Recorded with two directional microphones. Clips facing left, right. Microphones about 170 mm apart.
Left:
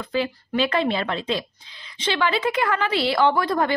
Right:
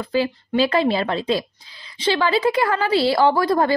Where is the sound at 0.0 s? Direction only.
35° right (ahead or behind).